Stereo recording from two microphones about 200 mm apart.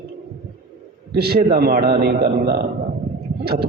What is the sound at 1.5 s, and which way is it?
Speech, 50° right (ahead or behind).